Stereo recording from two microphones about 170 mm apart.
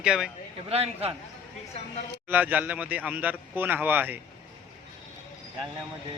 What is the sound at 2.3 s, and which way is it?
A man's voice, 10° right (ahead or behind).